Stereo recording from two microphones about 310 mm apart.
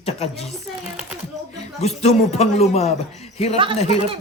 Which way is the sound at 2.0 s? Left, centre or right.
Left.